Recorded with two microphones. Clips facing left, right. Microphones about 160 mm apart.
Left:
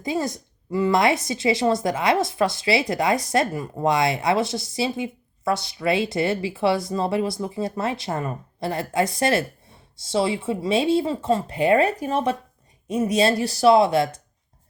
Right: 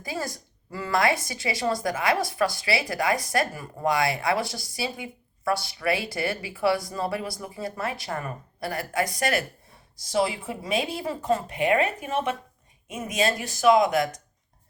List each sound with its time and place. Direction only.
0.0 s a woman's voice: 20° left (ahead or behind)